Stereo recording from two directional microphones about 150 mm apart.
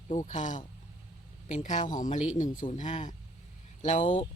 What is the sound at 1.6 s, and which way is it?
Speech, 55° left (ahead or behind).